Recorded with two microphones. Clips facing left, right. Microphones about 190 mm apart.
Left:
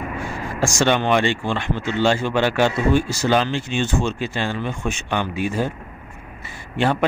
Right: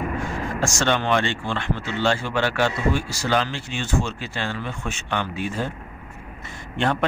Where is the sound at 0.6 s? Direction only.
10° left (ahead or behind).